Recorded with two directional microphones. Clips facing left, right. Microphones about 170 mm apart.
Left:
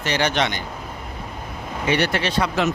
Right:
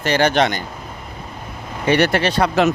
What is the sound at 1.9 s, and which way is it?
Speech, 65° right (ahead or behind).